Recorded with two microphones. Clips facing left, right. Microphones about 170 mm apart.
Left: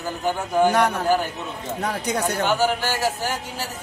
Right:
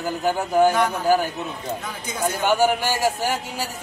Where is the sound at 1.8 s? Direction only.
70° left (ahead or behind).